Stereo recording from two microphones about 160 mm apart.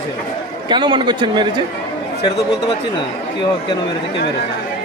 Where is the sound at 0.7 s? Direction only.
30° right (ahead or behind).